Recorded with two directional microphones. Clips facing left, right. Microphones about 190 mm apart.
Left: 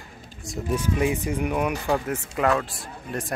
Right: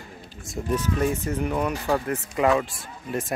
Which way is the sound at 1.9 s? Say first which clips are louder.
Even; centre (ahead or behind).